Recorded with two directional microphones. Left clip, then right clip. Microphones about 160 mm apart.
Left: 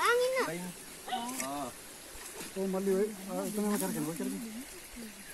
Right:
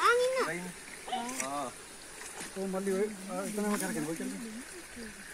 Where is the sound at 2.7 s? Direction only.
55° left (ahead or behind).